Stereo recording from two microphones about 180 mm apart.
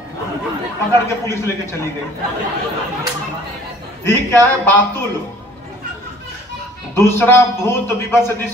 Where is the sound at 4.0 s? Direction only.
15° left (ahead or behind).